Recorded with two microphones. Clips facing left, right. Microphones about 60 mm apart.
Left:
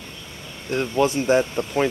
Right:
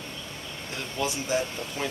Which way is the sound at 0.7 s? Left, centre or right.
Left.